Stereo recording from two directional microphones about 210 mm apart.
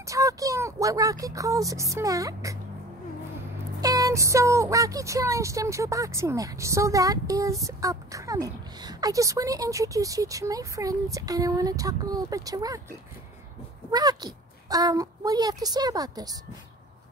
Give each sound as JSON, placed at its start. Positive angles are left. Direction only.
{"t": 0.0, "sound": "a woman's voice", "side_deg": -15}
{"t": 3.8, "sound": "a woman's voice", "side_deg": -15}
{"t": 13.8, "sound": "a woman's voice", "side_deg": -20}